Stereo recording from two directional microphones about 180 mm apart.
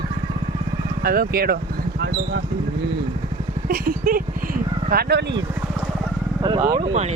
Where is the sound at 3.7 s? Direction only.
50° right (ahead or behind).